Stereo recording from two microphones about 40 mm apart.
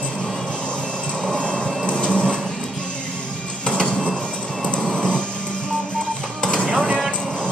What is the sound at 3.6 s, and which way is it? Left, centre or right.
Printer, left.